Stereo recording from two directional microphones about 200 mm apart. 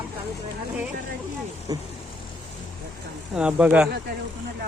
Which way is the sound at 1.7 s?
20° right (ahead or behind).